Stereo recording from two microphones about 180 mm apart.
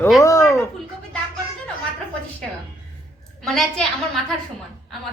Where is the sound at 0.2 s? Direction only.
20° left (ahead or behind).